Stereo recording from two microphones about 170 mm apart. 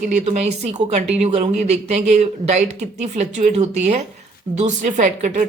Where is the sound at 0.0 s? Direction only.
45° right (ahead or behind).